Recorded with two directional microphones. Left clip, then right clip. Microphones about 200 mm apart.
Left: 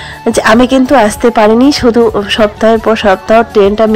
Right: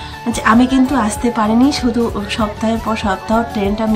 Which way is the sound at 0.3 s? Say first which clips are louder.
Left 7 dB; 15° left (ahead or behind).